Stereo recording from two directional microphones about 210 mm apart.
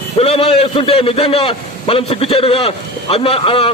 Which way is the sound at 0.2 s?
25° left (ahead or behind).